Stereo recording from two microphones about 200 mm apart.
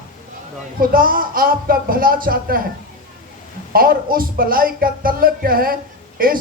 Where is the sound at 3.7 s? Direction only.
45° right (ahead or behind).